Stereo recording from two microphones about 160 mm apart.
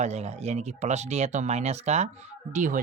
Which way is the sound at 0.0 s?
45° right (ahead or behind).